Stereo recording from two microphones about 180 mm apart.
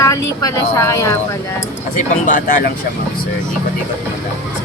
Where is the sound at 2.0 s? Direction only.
45° left (ahead or behind).